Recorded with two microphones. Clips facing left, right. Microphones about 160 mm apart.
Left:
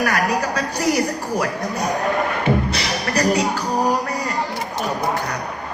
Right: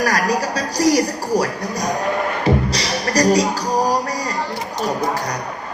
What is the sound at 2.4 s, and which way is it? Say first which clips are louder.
Music: right 1 dB; 35° right (ahead or behind).